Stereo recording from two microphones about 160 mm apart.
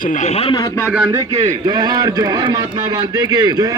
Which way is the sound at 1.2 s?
35° right (ahead or behind).